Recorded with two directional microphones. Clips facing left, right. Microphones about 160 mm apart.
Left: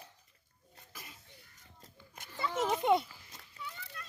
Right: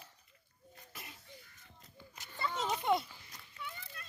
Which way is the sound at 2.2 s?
50° left (ahead or behind).